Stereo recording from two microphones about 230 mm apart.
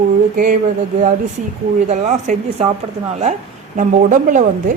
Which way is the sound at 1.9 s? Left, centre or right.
Right.